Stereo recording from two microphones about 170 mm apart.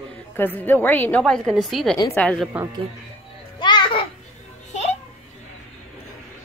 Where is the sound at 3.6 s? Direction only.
25° left (ahead or behind).